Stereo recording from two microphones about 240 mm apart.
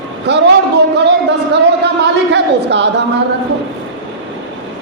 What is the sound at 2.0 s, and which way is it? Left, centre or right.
Speech, right.